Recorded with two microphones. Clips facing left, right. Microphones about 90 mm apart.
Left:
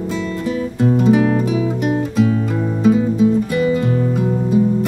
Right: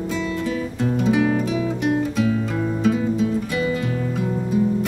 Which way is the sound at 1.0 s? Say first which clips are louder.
Left 4 dB; centre (ahead or behind).